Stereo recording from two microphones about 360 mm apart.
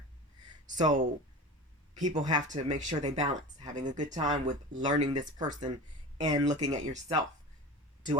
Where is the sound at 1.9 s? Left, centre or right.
Centre.